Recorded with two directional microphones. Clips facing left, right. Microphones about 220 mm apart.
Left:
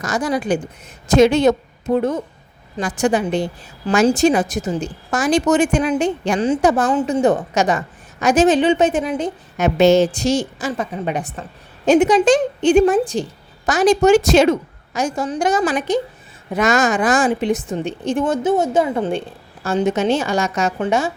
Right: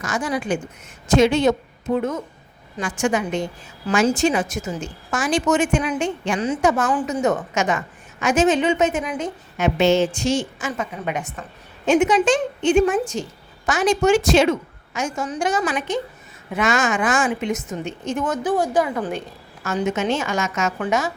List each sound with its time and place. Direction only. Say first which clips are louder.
0.0 s a woman's voice: left 4 dB; 40° left (ahead or behind)